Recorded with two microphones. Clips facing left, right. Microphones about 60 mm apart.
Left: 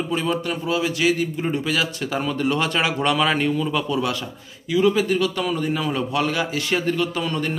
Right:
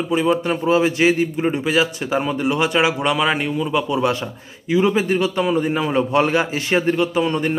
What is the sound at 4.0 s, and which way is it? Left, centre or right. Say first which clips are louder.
A man's voice: right 5 dB; right.